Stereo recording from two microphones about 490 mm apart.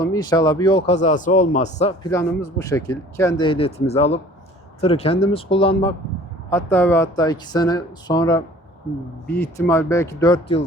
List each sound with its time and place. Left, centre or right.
0.1 s a man's voice: centre